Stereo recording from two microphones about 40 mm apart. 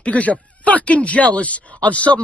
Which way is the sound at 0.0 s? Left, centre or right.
Left.